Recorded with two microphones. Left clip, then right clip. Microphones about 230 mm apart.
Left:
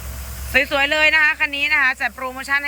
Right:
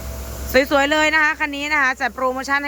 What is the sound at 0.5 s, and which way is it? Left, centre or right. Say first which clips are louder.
Speech: right 1 dB; centre.